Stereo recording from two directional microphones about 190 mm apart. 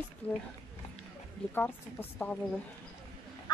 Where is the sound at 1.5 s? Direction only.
10° left (ahead or behind).